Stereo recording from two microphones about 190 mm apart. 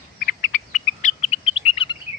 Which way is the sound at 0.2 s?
45° left (ahead or behind).